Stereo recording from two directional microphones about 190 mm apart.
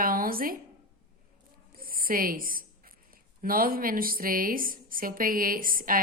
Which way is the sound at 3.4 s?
50° right (ahead or behind).